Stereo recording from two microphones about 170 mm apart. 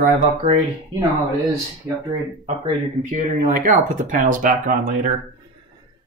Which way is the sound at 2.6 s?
45° right (ahead or behind).